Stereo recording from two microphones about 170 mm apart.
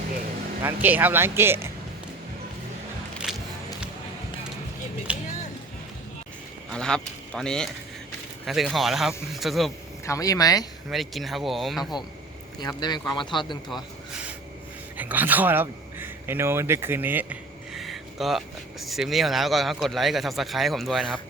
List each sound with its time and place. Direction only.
0.6 s speech: 10° right (ahead or behind)
3.2 s music: 5° right (ahead or behind)
5.1 s a sound: 5° right (ahead or behind)
6.7 s speech: 5° left (ahead or behind)
10.1 s speech: 20° left (ahead or behind)
10.8 s speech: centre (ahead or behind)
12.5 s speech: 25° left (ahead or behind)
13.7 s a sound: centre (ahead or behind)
14.9 s a man's voice: 10° right (ahead or behind)
17.7 s speech: centre (ahead or behind)